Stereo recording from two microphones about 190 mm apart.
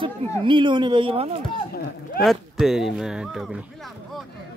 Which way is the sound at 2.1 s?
Centre (ahead or behind).